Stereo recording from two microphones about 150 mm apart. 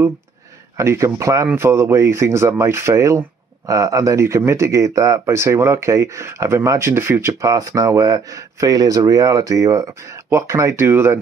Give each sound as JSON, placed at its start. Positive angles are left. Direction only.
{"t": 0.7, "sound": "speech", "side_deg": -20}